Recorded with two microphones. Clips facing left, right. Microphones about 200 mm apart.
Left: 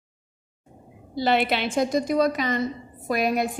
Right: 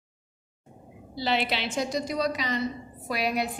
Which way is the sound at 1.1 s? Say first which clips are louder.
Left 5 dB; 50° left (ahead or behind).